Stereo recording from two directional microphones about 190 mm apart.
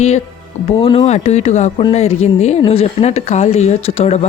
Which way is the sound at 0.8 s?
30° left (ahead or behind).